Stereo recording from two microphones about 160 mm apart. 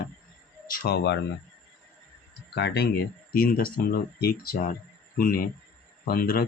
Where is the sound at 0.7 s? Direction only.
85° left.